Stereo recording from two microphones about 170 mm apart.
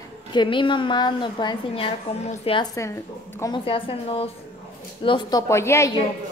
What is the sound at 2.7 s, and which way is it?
Speech, 15° left (ahead or behind).